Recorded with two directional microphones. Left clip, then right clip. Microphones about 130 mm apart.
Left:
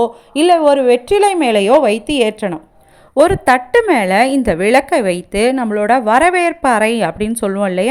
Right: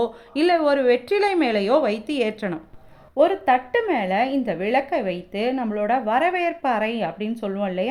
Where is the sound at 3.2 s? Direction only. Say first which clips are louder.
Left 7 dB; 60° left (ahead or behind).